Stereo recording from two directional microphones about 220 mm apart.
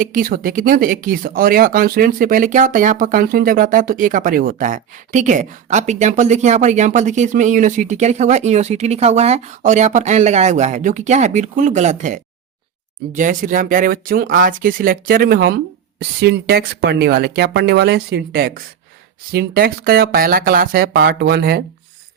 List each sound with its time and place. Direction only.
0.0 s speech: 40° right (ahead or behind)